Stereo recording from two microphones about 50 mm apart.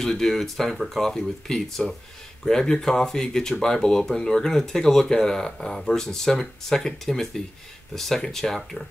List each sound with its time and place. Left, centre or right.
0.0 s speech: centre